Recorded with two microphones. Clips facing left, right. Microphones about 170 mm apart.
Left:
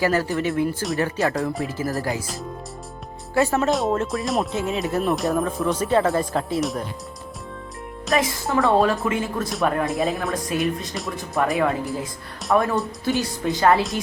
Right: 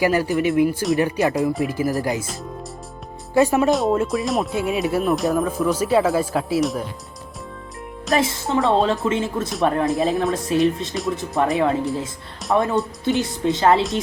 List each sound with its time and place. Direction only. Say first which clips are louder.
0.0 s speech: right 3 dB; 15° right (ahead or behind)
3.3 s speech: right 4 dB; 15° right (ahead or behind)
3.7 s speech: right 3 dB; centre (ahead or behind)
4.5 s speech: right 3 dB; 10° right (ahead or behind)
8.1 s speech: right 2 dB; 25° right (ahead or behind)
9.9 s speech: right 3 dB; centre (ahead or behind)
10.3 s speech: right 5 dB; 30° right (ahead or behind)